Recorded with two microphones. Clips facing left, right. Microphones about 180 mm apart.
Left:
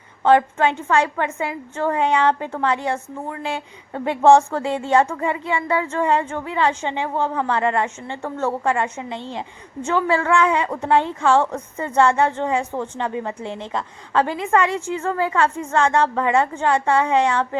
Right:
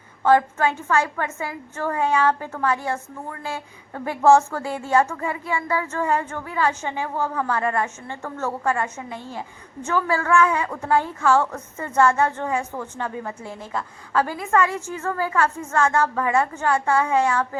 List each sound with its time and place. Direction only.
0.3 s speech: 25° left (ahead or behind)